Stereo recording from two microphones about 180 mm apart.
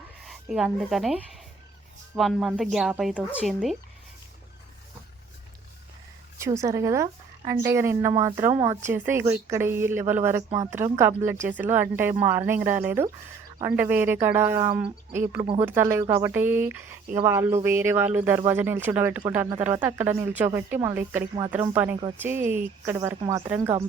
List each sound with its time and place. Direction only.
0.3 s a woman's voice: 5° right (ahead or behind)
6.4 s speech: 15° right (ahead or behind)
15.4 s speech: 30° right (ahead or behind)
15.6 s speech: 10° right (ahead or behind)